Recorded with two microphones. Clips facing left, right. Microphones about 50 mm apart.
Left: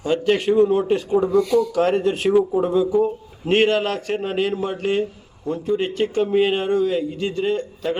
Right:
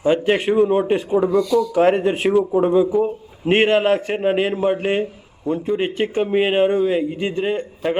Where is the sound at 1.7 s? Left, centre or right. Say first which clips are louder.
Right 3 dB; right.